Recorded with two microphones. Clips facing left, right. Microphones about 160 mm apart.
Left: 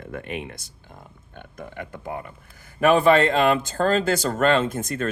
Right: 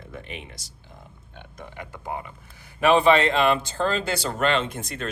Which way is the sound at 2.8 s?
50° left (ahead or behind).